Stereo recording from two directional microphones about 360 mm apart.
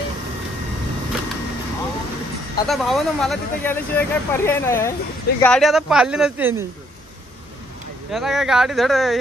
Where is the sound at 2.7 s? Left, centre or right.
Centre.